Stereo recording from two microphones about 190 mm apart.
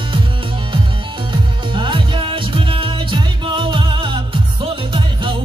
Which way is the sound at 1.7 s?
25° right (ahead or behind).